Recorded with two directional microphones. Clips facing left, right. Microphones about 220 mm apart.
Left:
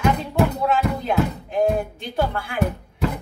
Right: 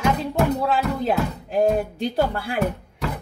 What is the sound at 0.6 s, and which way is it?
Speech, 35° right (ahead or behind).